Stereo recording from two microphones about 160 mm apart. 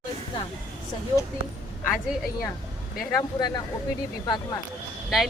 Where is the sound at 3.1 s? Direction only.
25° left (ahead or behind).